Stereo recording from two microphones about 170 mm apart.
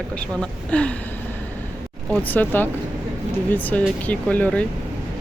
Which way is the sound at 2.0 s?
10° left (ahead or behind).